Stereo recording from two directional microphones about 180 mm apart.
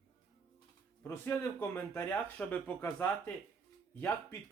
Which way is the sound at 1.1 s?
15° left (ahead or behind).